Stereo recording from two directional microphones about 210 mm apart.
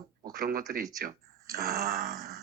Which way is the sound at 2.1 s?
15° right (ahead or behind).